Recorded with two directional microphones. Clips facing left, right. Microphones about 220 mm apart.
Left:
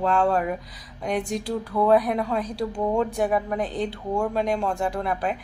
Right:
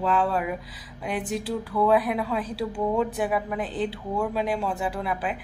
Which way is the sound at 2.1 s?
45° left (ahead or behind).